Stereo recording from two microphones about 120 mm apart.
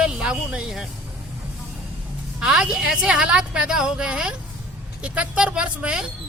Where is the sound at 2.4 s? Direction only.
5° right (ahead or behind).